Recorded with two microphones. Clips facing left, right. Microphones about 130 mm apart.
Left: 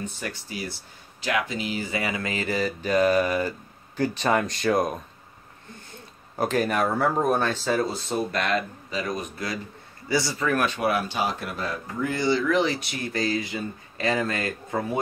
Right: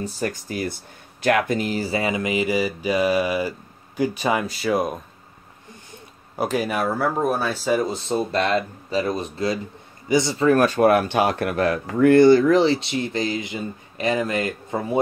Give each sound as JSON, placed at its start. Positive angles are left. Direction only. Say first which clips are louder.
{"t": 0.0, "sound": "speech", "louder": "right 7 dB", "side_deg": -40}
{"t": 6.3, "sound": "speech", "louder": "right 1 dB", "side_deg": -10}
{"t": 10.5, "sound": "speech", "louder": "right 9 dB", "side_deg": -40}